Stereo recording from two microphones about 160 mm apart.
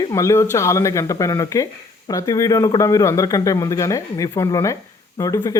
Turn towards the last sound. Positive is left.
turn(degrees=20)  # may be behind; listen again after turning